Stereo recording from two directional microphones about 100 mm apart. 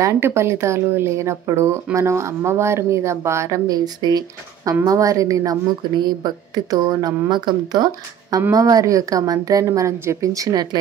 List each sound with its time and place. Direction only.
0.0 s speech: 25° right (ahead or behind)